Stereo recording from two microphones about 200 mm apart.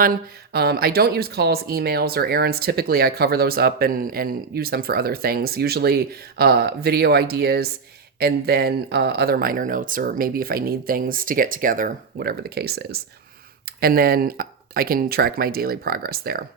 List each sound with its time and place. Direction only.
0.5 s speech: 50° right (ahead or behind)